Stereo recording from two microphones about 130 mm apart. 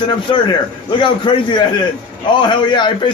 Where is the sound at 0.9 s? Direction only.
40° left (ahead or behind).